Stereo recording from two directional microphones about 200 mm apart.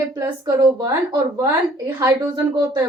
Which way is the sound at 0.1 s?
20° right (ahead or behind).